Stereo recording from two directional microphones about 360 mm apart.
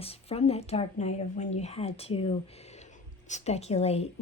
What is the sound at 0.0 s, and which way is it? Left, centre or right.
Speech, centre.